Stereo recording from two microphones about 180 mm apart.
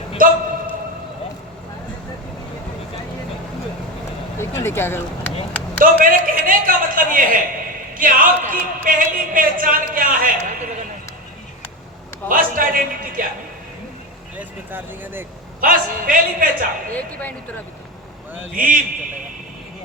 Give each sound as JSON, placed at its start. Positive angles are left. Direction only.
{"t": 0.2, "sound": "a sound", "side_deg": -50}
{"t": 4.4, "sound": "speech", "side_deg": 15}
{"t": 5.8, "sound": "speech", "side_deg": -50}
{"t": 12.3, "sound": "speech", "side_deg": -50}
{"t": 14.3, "sound": "speech", "side_deg": -10}
{"t": 15.6, "sound": "speech", "side_deg": -50}
{"t": 16.9, "sound": "speech", "side_deg": 10}
{"t": 18.5, "sound": "speech", "side_deg": -50}